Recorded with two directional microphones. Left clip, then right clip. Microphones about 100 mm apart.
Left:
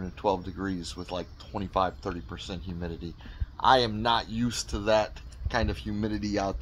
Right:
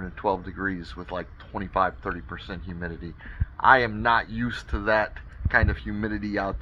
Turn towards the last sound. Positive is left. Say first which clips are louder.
# right 2 dB
turn(degrees=20)  # may be behind; listen again after turning